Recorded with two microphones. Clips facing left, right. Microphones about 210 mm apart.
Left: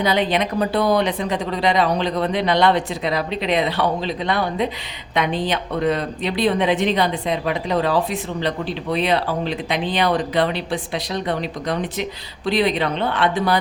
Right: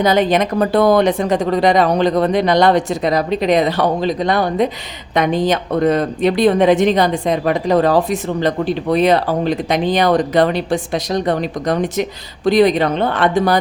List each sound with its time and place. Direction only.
0.0 s a woman's voice: 45° right (ahead or behind)